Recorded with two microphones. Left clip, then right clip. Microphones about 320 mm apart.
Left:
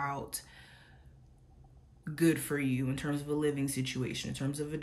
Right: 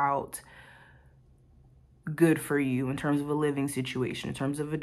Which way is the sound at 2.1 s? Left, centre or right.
Centre.